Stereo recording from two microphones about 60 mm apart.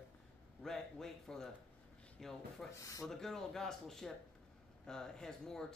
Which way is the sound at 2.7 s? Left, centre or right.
Left.